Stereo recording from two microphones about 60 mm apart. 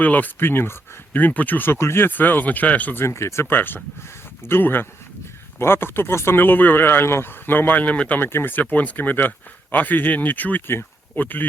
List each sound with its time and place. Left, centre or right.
0.0 s speech: left
3.0 s speech: left
3.5 s speech: left
8.2 s speech: left